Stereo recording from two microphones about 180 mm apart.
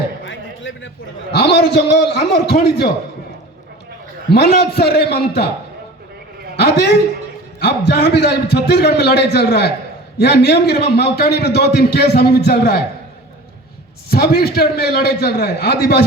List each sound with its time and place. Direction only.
0.3 s a sound: 90° left
1.3 s a man's voice: 70° left (ahead or behind)
4.3 s a man's voice: 60° left (ahead or behind)
6.6 s a man's voice: 65° left (ahead or behind)
14.1 s a man's voice: 60° left (ahead or behind)